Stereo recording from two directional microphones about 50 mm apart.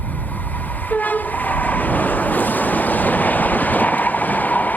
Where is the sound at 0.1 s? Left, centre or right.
Left.